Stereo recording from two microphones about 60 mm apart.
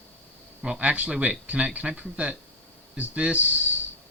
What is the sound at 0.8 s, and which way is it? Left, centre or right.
Speech, right.